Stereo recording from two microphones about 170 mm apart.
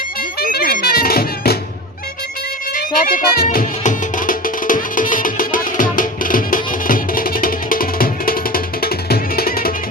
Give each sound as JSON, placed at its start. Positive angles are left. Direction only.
{"t": 0.5, "sound": "music", "side_deg": 65}
{"t": 2.7, "sound": "speech", "side_deg": 55}
{"t": 3.5, "sound": "music", "side_deg": 55}